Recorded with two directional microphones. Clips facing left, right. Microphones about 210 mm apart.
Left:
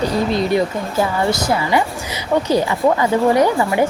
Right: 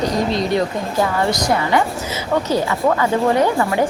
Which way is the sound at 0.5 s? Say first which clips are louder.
Left 1 dB; 5° left (ahead or behind).